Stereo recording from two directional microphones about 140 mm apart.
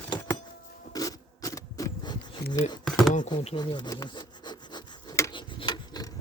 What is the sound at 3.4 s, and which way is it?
Rub, 35° left (ahead or behind).